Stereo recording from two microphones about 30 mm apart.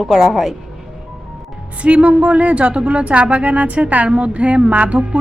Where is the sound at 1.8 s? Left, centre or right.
Right.